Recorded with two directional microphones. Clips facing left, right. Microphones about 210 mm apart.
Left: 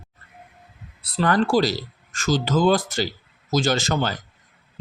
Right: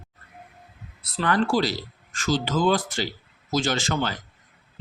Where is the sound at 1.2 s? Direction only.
40° left (ahead or behind).